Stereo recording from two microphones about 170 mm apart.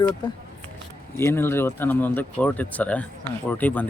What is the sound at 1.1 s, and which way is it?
Speech, 15° left (ahead or behind).